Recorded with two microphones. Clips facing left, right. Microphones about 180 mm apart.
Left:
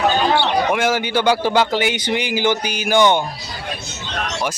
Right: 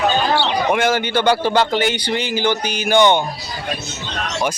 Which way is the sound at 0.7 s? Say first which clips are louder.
Right 1 dB; 5° left (ahead or behind).